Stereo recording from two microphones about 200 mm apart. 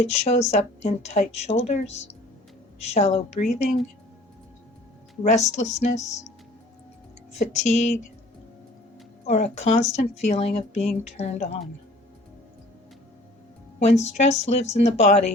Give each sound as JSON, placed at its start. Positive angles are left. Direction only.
{"t": 0.0, "sound": "speech", "side_deg": 35}
{"t": 5.2, "sound": "speech", "side_deg": 35}
{"t": 7.3, "sound": "speech", "side_deg": 35}
{"t": 9.2, "sound": "speech", "side_deg": 35}
{"t": 13.7, "sound": "speech", "side_deg": 35}